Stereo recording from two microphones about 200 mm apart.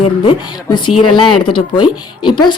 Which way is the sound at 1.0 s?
25° left (ahead or behind).